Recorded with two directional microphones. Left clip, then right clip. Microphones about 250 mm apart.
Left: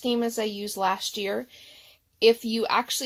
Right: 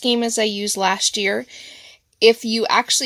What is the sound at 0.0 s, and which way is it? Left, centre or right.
Speech, right.